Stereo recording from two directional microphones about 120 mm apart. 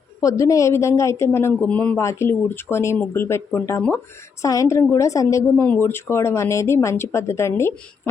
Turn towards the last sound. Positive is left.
turn(degrees=20)  # may be behind; listen again after turning